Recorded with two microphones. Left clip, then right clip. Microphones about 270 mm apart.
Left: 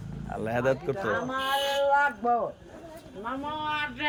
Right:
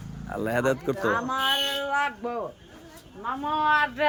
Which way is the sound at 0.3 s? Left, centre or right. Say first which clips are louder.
Right 2 dB; right.